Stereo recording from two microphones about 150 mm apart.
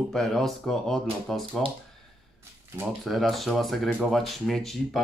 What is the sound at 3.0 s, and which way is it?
A child's voice, centre (ahead or behind).